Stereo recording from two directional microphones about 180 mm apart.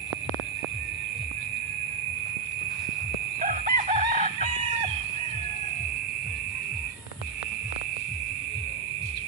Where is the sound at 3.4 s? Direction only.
45° right (ahead or behind).